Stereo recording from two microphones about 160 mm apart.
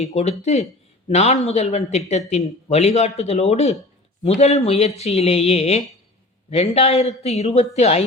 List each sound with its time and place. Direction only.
0.0 s a man's voice: 40° left (ahead or behind)